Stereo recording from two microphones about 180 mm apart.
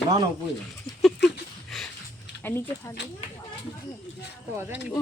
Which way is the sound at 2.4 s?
15° left (ahead or behind).